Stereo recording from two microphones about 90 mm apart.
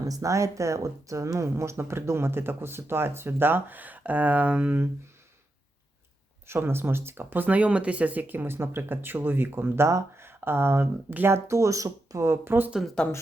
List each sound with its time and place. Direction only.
0.0 s speech: 40° right (ahead or behind); by 4.9 s 20° right (ahead or behind)
6.5 s speech: 25° right (ahead or behind)